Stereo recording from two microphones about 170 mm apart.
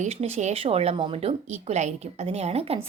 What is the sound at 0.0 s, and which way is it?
Speech, 40° right (ahead or behind).